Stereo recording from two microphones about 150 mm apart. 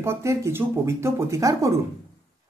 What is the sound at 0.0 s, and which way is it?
Speech, 15° right (ahead or behind).